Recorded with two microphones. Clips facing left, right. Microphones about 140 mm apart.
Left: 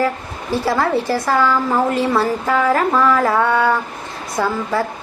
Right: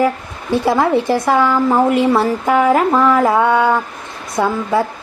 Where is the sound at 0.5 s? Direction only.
20° right (ahead or behind).